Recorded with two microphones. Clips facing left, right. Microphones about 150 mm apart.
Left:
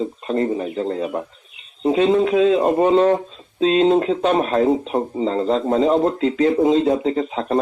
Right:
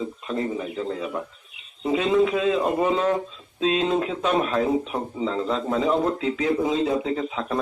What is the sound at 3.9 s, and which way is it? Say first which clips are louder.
Speech: left 5 dB; 55° left (ahead or behind).